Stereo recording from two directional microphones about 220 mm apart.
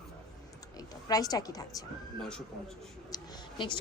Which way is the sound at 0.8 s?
15° left (ahead or behind).